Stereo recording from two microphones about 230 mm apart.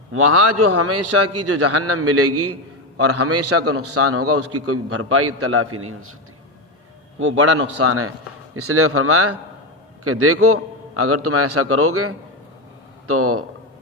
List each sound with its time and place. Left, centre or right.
0.1 s a man's voice: right
0.7 s a man's voice: right
7.2 s a man's voice: right